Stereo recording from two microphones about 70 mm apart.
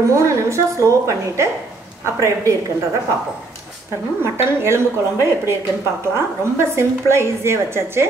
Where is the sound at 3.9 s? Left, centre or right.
Right.